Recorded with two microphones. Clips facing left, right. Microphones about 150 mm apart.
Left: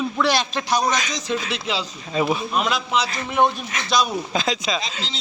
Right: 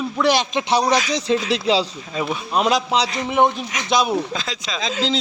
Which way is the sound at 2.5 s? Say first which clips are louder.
Right 4 dB; 35° right (ahead or behind).